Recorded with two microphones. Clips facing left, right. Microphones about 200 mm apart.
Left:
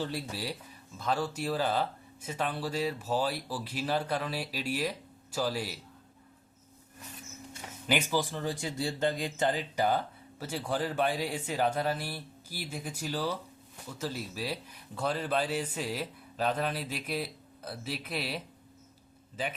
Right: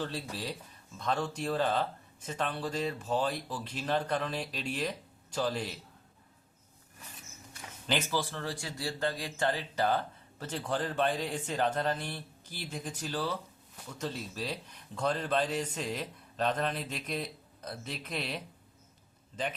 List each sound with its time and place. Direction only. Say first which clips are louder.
0.0 s speech: left 2 dB; 10° left (ahead or behind)
7.9 s speech: left 3 dB; 15° left (ahead or behind)